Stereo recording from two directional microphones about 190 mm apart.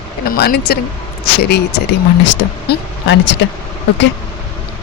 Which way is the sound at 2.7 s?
70° left (ahead or behind).